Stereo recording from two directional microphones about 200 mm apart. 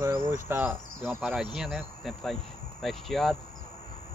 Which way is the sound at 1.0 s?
Centre (ahead or behind).